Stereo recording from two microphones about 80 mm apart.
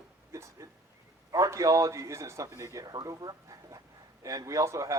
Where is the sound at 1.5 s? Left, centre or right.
Right.